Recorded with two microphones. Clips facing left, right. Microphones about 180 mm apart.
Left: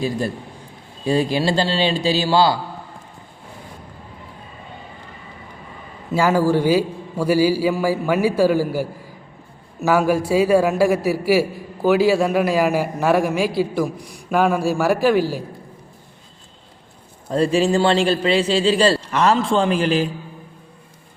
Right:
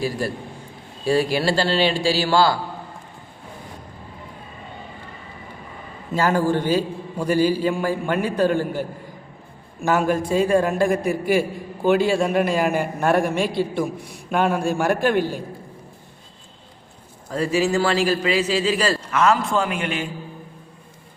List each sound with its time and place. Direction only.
1.0 s a man's voice: 20° left (ahead or behind)
6.1 s a man's voice: 10° left (ahead or behind)
17.2 s a man's voice: 30° left (ahead or behind)